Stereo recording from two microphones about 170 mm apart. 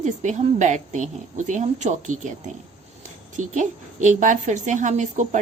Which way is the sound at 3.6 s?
45° right (ahead or behind).